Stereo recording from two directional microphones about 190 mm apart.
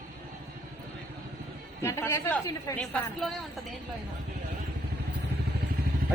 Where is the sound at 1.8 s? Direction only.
15° left (ahead or behind).